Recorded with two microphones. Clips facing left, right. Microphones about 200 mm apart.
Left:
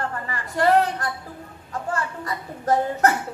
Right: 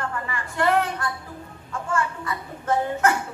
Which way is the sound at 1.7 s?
35° left (ahead or behind).